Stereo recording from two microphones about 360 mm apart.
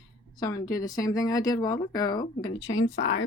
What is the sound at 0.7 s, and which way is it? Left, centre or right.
Speech, centre.